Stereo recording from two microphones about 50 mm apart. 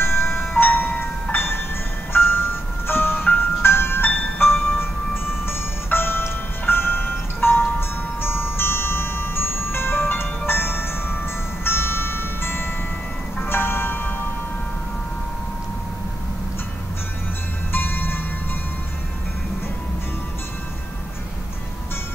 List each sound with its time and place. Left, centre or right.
0.0 s music: left
17.7 s music: left